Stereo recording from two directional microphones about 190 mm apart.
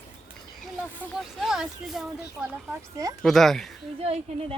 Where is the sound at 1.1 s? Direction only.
Centre (ahead or behind).